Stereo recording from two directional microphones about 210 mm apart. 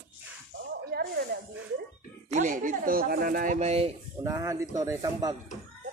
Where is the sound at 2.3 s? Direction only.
40° right (ahead or behind).